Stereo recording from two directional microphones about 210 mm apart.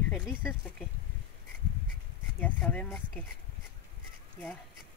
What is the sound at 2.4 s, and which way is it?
Speech, 5° left (ahead or behind).